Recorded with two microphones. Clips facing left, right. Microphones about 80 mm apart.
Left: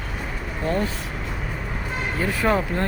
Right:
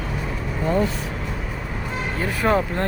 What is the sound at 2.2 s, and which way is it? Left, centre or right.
Speech, right.